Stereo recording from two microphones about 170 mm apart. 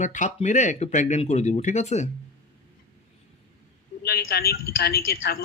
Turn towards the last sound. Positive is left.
turn(degrees=65)  # may be behind; listen again after turning